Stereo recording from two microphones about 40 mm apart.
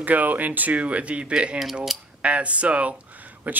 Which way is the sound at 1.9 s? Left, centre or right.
Centre.